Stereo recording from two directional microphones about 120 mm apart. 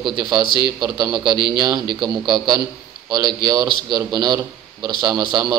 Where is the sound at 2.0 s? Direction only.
Centre (ahead or behind).